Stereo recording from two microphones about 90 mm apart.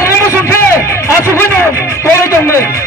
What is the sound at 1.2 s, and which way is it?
A man's voice, 30° left (ahead or behind).